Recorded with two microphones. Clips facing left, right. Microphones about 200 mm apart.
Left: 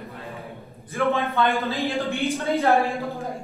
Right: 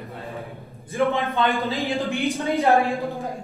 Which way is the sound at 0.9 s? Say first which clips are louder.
Right 1 dB; 15° right (ahead or behind).